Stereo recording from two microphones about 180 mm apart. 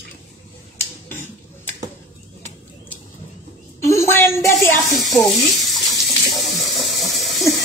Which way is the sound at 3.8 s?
15° left (ahead or behind).